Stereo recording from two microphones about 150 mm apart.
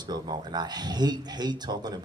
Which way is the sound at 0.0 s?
30° right (ahead or behind).